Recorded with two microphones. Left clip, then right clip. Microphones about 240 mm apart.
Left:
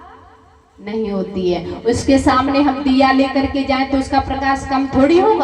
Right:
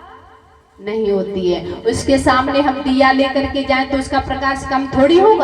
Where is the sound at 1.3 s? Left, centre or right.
Right.